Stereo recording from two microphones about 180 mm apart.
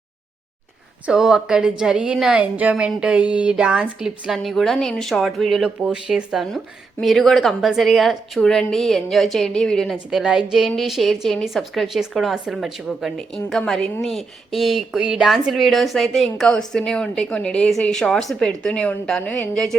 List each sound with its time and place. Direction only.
1.0 s a woman's voice: 5° right (ahead or behind)